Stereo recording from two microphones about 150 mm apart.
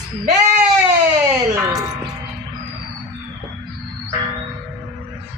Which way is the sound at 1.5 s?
20° right (ahead or behind).